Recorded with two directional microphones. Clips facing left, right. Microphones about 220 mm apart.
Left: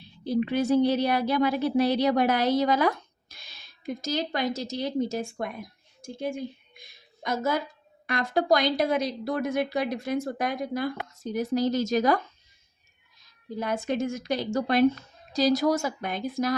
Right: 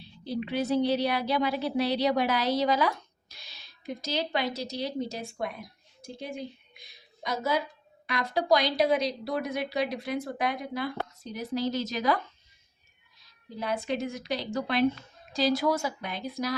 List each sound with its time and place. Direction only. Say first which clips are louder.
0.0 s a woman's voice: left 7 dB; 50° left (ahead or behind)
13.2 s a woman's voice: left 3 dB; 45° left (ahead or behind)